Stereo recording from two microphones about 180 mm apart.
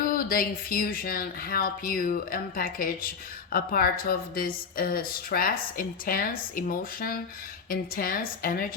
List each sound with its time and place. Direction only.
0.0 s speech: 50° left (ahead or behind)